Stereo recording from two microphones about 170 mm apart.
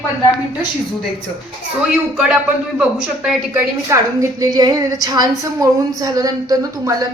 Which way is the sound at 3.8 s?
15° right (ahead or behind).